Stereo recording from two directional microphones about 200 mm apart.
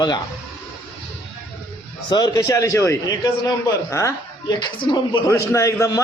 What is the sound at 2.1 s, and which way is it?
A man's voice, 20° left (ahead or behind).